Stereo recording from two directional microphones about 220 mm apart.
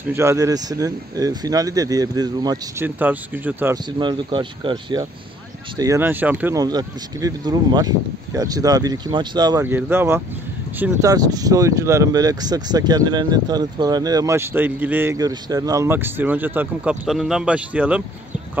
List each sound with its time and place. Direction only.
0.0 s speech: 10° right (ahead or behind)
4.0 s speech: 20° right (ahead or behind); by 18.0 s 5° right (ahead or behind)